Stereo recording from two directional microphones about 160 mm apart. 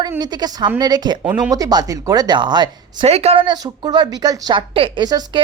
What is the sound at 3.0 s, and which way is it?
Speech, 40° right (ahead or behind).